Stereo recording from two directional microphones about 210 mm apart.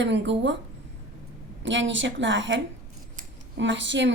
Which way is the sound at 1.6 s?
60° right (ahead or behind).